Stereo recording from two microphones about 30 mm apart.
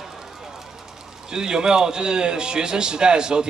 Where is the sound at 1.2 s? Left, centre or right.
Right.